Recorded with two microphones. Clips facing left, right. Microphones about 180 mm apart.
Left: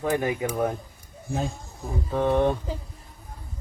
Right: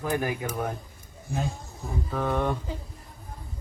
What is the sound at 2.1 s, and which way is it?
Speech, 20° left (ahead or behind).